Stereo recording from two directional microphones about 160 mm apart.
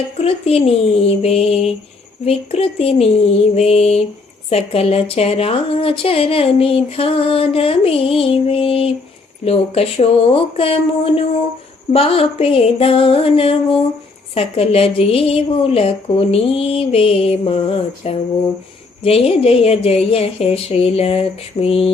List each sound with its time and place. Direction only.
0.2 s speech: 40° left (ahead or behind)